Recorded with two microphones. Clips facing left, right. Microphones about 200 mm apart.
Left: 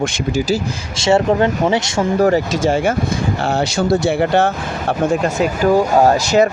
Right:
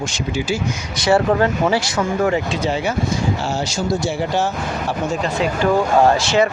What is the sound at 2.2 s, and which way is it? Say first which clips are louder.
Speech: left 6 dB; 40° left (ahead or behind).